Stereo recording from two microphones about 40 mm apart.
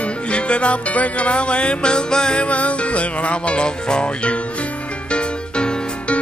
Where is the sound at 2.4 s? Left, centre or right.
Left.